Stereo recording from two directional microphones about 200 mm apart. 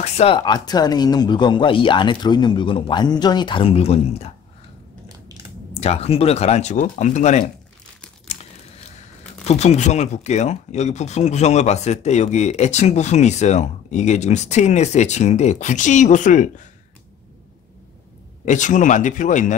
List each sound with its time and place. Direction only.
0.0 s speech: 30° left (ahead or behind)
5.7 s speech: 30° left (ahead or behind)
8.3 s crumpling: 35° left (ahead or behind)
9.4 s speech: 35° left (ahead or behind)
18.4 s speech: 40° left (ahead or behind)